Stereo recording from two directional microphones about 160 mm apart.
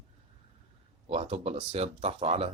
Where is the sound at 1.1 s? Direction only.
40° right (ahead or behind).